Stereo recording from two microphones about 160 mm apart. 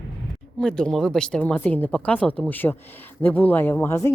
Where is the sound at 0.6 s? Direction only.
5° left (ahead or behind).